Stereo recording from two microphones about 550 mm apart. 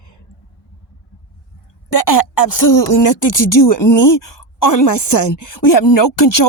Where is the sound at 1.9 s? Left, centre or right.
Left.